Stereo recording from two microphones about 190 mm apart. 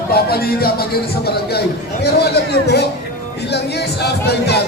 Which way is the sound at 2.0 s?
60° left (ahead or behind).